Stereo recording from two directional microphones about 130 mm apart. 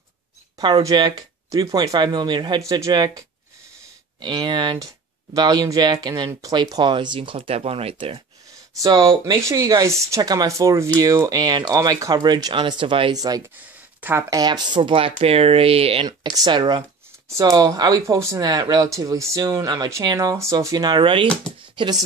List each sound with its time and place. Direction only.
0.6 s speech: 35° right (ahead or behind)
8.8 s speech: 30° right (ahead or behind)
13.1 s speech: 30° right (ahead or behind); by 16.1 s 50° right (ahead or behind)
16.1 s speech: 30° right (ahead or behind)